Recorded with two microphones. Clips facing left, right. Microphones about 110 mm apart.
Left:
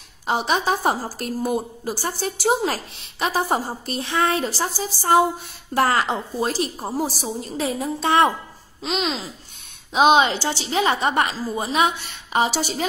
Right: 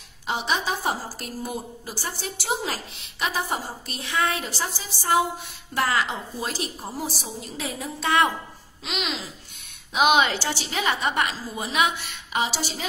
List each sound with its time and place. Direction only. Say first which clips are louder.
0.3 s a woman's voice: left 5 dB; 45° left (ahead or behind)